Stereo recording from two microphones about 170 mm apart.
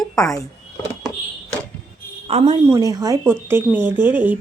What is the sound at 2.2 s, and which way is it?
Speech, 35° right (ahead or behind).